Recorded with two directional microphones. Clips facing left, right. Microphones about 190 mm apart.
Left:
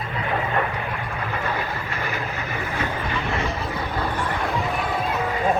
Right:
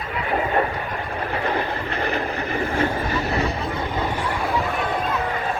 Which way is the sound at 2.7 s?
40° right (ahead or behind).